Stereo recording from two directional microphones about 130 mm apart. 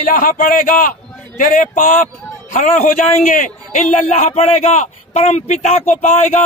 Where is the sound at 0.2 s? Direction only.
90° left.